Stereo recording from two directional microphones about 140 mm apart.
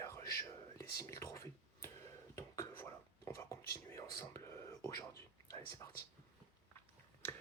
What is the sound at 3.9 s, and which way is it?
Whispering, 20° left (ahead or behind).